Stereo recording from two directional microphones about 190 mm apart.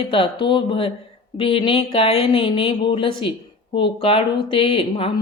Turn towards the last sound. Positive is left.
turn(degrees=30)  # may be behind; listen again after turning